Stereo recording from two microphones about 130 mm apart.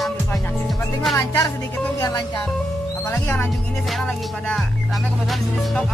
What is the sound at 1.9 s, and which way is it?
Speech, 30° left (ahead or behind).